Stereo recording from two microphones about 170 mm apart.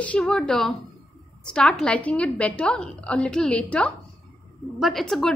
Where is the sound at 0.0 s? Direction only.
5° left (ahead or behind).